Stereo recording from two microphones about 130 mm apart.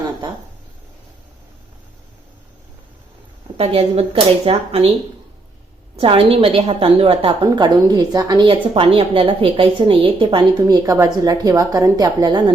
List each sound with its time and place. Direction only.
3.6 s a woman's voice: 50° right (ahead or behind)
6.0 s a woman's voice: 45° right (ahead or behind)
7.5 s a woman's voice: 35° right (ahead or behind)
10.8 s a woman's voice: 25° right (ahead or behind)